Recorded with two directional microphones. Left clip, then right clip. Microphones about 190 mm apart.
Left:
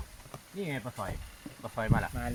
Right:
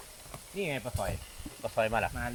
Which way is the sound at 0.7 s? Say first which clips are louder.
Right 3 dB; 15° right (ahead or behind).